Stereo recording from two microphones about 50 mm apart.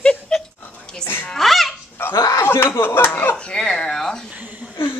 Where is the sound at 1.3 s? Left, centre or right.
Centre.